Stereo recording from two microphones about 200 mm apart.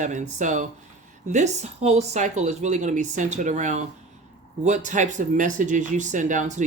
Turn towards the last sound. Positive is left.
turn(degrees=-40)  # may be behind; listen again after turning